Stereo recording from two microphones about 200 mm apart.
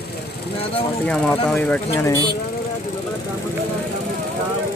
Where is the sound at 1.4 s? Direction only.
5° left (ahead or behind).